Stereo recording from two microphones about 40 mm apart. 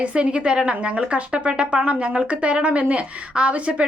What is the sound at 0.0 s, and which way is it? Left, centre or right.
A woman's voice, right.